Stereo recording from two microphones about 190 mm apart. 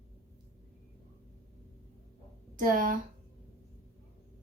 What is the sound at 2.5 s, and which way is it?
Speech, 45° right (ahead or behind).